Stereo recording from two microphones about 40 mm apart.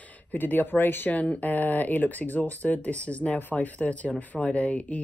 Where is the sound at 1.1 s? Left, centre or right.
Left.